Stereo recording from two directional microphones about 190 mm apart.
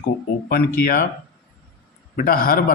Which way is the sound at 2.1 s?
50° left (ahead or behind).